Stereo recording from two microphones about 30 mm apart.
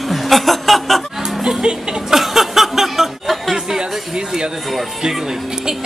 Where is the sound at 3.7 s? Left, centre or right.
Right.